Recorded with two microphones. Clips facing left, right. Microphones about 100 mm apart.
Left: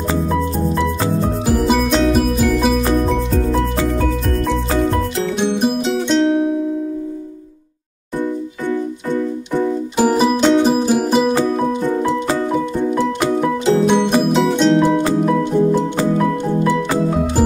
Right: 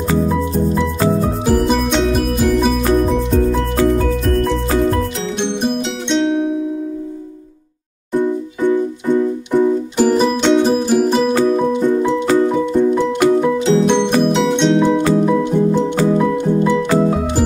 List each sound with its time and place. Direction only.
1.5 s music: 5° left (ahead or behind)
5.4 s music: 5° left (ahead or behind)
8.6 s keyboard: 15° right (ahead or behind)
9.9 s music: 5° left (ahead or behind)
13.8 s music: 5° left (ahead or behind)